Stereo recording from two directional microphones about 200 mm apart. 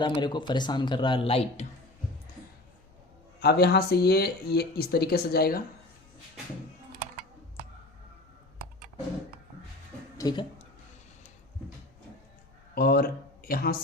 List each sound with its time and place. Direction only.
0.0 s a man's voice: 20° left (ahead or behind)
3.4 s speech: 55° left (ahead or behind)
10.2 s speech: 20° left (ahead or behind)
12.7 s speech: 50° left (ahead or behind)